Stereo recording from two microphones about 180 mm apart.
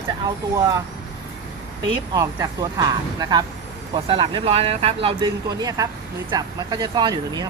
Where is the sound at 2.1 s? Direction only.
20° right (ahead or behind).